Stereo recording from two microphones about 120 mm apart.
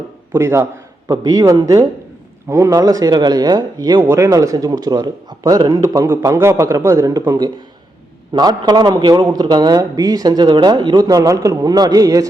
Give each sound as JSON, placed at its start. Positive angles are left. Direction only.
{"t": 0.3, "sound": "a man's voice", "side_deg": -20}